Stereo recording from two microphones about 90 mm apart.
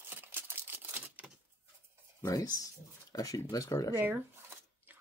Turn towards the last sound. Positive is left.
turn(degrees=40)  # may be behind; listen again after turning